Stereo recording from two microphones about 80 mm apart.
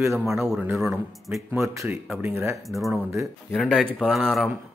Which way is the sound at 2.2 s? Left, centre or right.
Right.